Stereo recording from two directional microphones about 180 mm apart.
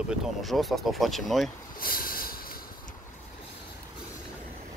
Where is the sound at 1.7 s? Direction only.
55° left (ahead or behind).